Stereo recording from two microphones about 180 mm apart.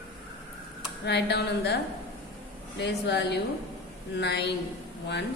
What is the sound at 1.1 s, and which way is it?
Speech, 70° left (ahead or behind).